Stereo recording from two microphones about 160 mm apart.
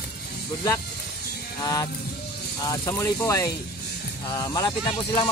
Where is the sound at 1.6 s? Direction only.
20° left (ahead or behind).